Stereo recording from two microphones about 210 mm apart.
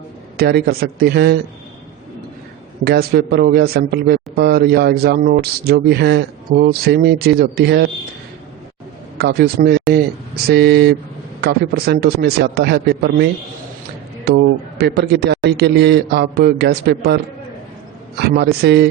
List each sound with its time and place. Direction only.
0.3 s speech: 50° right (ahead or behind)
2.8 s speech: 50° right (ahead or behind)
9.1 s speech: 50° right (ahead or behind)
18.2 s speech: 50° right (ahead or behind)